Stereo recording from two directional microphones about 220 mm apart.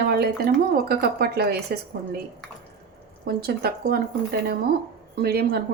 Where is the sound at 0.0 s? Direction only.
45° right (ahead or behind).